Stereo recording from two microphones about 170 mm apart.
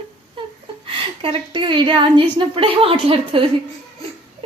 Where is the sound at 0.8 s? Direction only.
30° right (ahead or behind).